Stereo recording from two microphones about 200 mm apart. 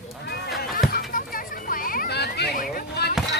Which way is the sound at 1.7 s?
45° left (ahead or behind).